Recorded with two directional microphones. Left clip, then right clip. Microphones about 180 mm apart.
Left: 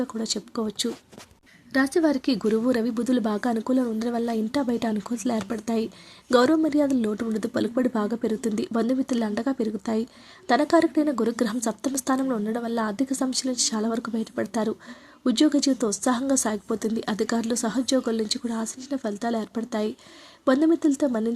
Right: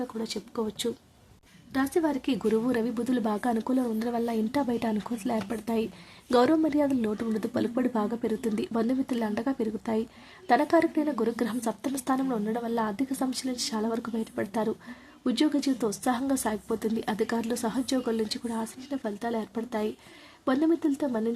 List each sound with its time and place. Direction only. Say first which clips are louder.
0.1 s a woman's voice: left 5 dB; 30° left (ahead or behind)